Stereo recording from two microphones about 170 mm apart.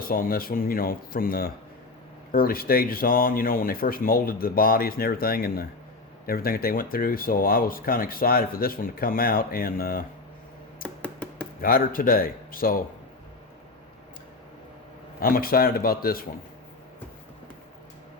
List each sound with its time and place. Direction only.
0.1 s speech: 60° left (ahead or behind)
10.8 s a sound: 5° left (ahead or behind)
11.6 s speech: 60° left (ahead or behind)
15.2 s speech: 60° left (ahead or behind)